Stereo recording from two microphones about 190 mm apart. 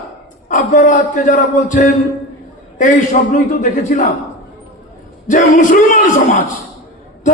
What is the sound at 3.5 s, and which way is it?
Speech, 40° left (ahead or behind).